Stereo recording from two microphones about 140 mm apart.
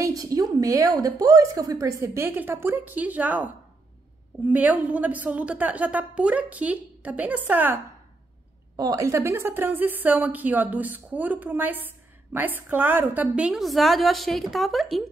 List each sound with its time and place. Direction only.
0.0 s a woman's voice: 25° right (ahead or behind)
8.7 s a woman's voice: 25° right (ahead or behind); by 15.0 s centre (ahead or behind)